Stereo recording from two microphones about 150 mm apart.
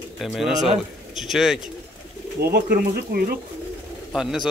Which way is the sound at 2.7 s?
85° right.